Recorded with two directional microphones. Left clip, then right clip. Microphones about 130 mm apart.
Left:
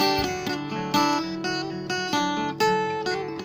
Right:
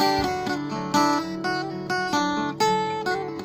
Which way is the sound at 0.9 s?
25° left (ahead or behind).